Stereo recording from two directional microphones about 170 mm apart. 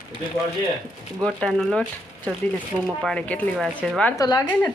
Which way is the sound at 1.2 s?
5° left (ahead or behind).